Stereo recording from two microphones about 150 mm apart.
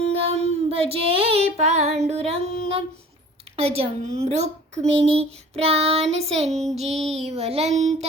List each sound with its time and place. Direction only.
0.1 s child singing: 40° right (ahead or behind)
2.0 s speech: 45° right (ahead or behind)